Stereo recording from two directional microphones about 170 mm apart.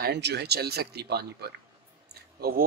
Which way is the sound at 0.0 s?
75° right (ahead or behind).